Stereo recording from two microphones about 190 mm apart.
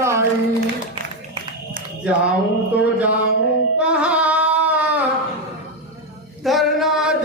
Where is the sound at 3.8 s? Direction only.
5° right (ahead or behind).